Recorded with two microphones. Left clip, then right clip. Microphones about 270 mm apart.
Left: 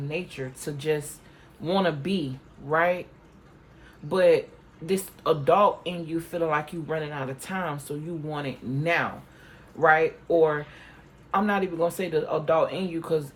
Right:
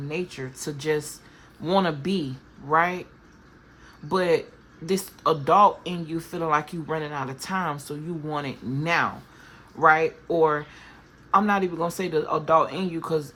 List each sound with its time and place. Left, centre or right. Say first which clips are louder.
0.1 s speech: right 2 dB; centre
4.1 s speech: left 2 dB; centre